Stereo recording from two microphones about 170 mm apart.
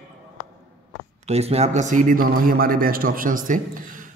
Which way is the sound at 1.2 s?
40° right (ahead or behind).